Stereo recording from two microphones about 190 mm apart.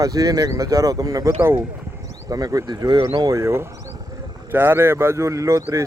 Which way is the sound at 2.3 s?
20° right (ahead or behind).